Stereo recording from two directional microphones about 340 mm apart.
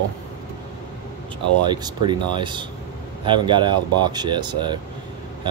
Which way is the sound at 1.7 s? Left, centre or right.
Centre.